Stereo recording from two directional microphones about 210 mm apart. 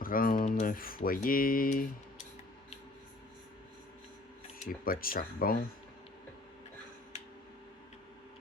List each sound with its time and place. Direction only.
0.0 s speech: 40° left (ahead or behind)
4.6 s speech: 45° left (ahead or behind)